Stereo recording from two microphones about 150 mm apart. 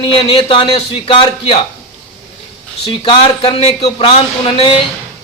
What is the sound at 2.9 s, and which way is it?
A man's voice, 35° left (ahead or behind).